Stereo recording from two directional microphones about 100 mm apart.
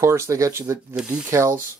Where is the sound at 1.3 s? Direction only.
25° right (ahead or behind).